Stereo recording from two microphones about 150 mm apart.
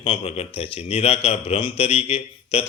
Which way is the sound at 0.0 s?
40° left (ahead or behind).